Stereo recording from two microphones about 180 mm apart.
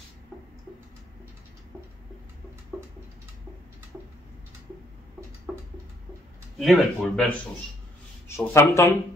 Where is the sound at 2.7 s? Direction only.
5° right (ahead or behind).